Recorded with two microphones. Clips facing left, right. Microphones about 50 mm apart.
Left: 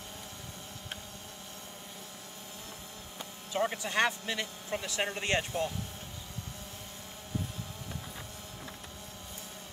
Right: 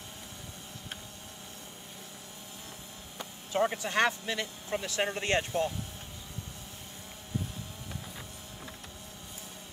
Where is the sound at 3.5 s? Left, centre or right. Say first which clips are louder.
Right 2 dB; right.